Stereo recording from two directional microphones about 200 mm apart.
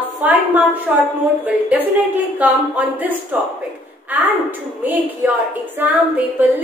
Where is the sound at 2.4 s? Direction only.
10° right (ahead or behind).